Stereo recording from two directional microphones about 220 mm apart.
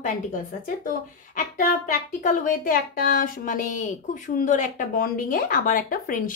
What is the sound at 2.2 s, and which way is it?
A woman's voice, 35° left (ahead or behind).